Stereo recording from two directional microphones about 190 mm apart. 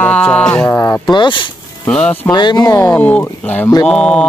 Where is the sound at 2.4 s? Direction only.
25° left (ahead or behind); by 4.2 s 5° left (ahead or behind).